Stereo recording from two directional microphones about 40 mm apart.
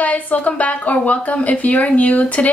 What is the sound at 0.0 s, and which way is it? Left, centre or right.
A woman's voice, left.